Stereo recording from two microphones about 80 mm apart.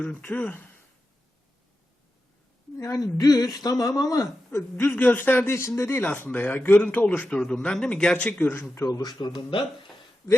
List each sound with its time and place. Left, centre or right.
0.0 s speech: left
2.7 s speech: left
4.5 s speech: left
8.9 s speech: left
9.5 s speech: left